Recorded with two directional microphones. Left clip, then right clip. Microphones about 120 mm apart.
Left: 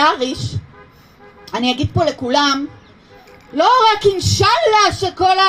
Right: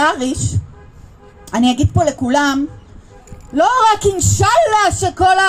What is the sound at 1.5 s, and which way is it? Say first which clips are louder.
Speech: right 2 dB; 65° right (ahead or behind).